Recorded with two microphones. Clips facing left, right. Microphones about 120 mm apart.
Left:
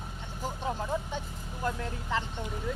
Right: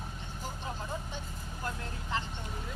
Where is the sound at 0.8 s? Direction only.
90° left.